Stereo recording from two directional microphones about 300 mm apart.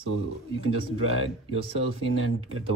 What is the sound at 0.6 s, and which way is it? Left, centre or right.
Speech, right.